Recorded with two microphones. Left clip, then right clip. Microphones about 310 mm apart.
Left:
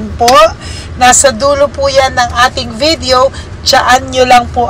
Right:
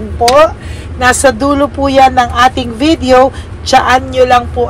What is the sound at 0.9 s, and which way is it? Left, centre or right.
Speech, centre.